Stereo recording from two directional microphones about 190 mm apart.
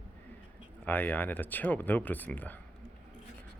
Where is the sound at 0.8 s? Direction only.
10° left (ahead or behind).